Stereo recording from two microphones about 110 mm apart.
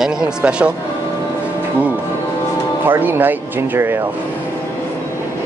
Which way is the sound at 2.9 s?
15° right (ahead or behind).